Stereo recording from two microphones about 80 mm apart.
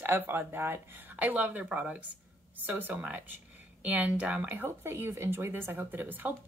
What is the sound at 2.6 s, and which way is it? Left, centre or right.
Speech, right.